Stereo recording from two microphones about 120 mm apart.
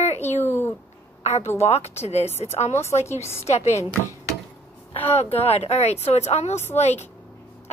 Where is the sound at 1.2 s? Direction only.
65° left (ahead or behind).